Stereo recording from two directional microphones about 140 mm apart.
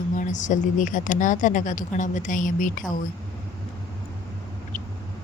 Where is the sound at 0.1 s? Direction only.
65° left (ahead or behind).